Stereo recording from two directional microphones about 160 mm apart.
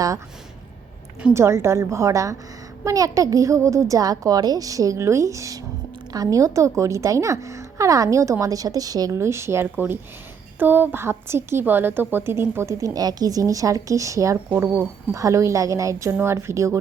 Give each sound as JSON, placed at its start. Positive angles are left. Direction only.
{"t": 1.3, "sound": "a woman's voice", "side_deg": -15}